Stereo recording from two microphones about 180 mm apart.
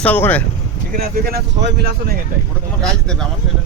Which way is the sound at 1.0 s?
60° right (ahead or behind).